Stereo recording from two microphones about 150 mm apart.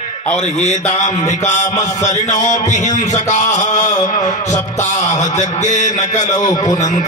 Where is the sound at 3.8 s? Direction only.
25° left (ahead or behind).